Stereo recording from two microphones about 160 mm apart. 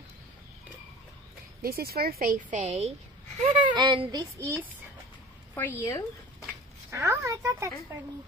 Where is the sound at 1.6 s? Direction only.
70° right (ahead or behind).